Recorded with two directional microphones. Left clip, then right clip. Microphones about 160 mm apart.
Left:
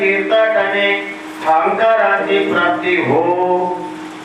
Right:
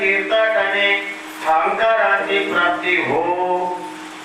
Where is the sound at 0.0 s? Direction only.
15° left (ahead or behind).